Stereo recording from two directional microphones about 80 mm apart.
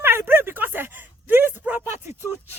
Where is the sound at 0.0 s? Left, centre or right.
Right.